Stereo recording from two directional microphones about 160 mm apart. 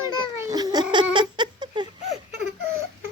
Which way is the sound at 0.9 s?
30° right (ahead or behind).